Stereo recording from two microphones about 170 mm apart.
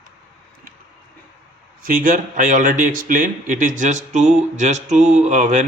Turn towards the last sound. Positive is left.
turn(degrees=-45)  # may be behind; listen again after turning